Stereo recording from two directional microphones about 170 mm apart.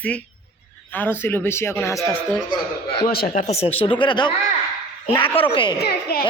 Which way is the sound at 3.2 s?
45° left (ahead or behind).